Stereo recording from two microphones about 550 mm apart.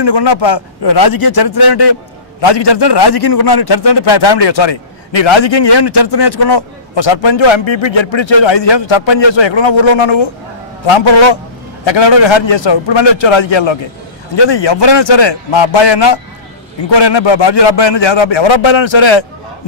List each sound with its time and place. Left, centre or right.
0.0 s a man's voice: left